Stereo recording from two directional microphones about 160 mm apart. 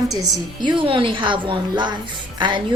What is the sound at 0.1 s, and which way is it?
A woman's voice, 25° right (ahead or behind).